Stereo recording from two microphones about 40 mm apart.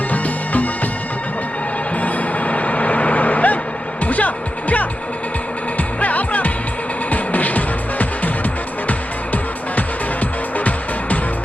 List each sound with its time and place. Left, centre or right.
0.1 s music: left
2.0 s music: left
6.0 s music: left